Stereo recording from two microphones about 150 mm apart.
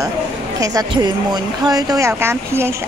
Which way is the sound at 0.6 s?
25° right (ahead or behind).